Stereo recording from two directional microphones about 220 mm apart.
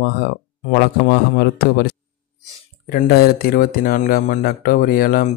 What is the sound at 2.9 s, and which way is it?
Speech, 40° left (ahead or behind).